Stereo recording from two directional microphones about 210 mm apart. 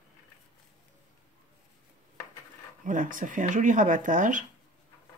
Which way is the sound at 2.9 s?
40° right (ahead or behind).